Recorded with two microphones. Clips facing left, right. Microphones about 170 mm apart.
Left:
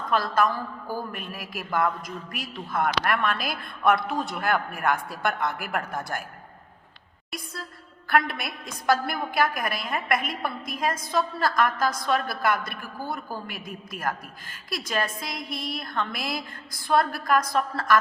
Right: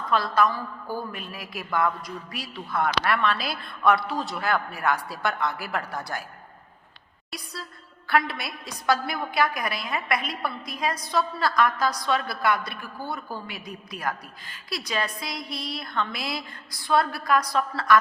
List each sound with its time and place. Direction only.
0.1 s a woman's voice: 50° left (ahead or behind)
7.3 s a woman's voice: 50° left (ahead or behind)